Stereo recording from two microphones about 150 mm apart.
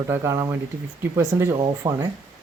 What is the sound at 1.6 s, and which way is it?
Speech, 30° right (ahead or behind).